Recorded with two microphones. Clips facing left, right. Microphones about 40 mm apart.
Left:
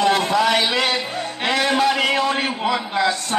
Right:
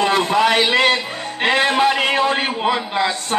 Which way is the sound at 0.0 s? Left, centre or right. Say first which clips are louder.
Right 1 dB; right.